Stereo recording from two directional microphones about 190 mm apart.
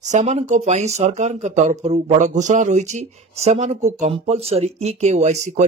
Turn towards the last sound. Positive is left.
turn(degrees=-35)  # may be behind; listen again after turning